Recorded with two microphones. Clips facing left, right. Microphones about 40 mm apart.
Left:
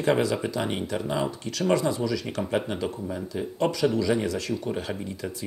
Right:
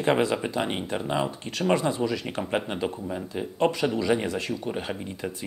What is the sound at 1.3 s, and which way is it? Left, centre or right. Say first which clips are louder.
Speech: even; right.